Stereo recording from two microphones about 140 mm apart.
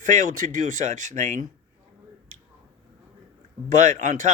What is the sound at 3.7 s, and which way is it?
Speech, 60° right (ahead or behind).